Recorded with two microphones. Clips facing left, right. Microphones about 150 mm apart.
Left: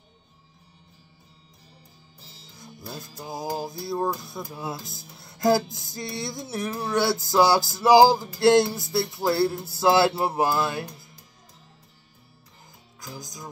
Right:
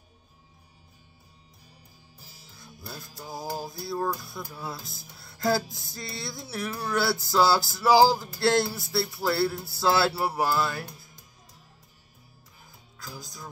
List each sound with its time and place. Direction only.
2.6 s music: 20° left (ahead or behind)
4.8 s speech: 20° left (ahead or behind)
5.7 s music: 20° left (ahead or behind)
13.0 s music: 15° left (ahead or behind)